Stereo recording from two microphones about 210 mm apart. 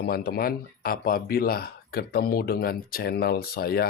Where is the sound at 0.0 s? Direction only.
45° left (ahead or behind).